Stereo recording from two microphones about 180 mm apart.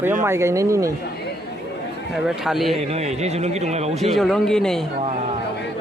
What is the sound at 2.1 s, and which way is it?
Speech, centre (ahead or behind).